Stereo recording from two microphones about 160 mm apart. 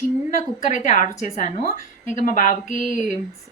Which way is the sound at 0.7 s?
50° left (ahead or behind).